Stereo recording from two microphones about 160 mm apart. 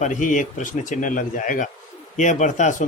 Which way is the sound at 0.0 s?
50° left (ahead or behind).